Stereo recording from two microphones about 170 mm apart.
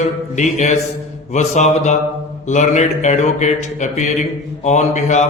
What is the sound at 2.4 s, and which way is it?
Speech, 45° left (ahead or behind).